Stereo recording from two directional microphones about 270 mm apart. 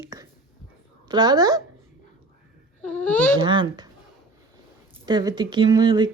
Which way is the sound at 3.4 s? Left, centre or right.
Centre.